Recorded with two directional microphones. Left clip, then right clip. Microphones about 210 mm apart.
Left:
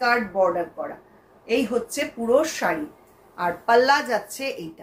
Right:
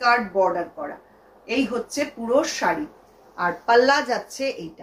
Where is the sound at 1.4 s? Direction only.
10° left (ahead or behind).